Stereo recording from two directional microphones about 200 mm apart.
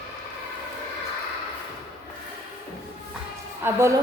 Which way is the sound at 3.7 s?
15° right (ahead or behind).